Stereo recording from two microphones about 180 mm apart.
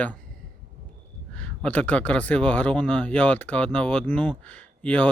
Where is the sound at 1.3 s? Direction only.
5° left (ahead or behind).